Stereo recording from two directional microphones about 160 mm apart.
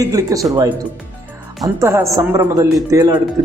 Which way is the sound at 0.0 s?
20° right (ahead or behind).